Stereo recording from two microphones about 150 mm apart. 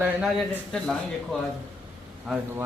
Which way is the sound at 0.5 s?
5° left (ahead or behind).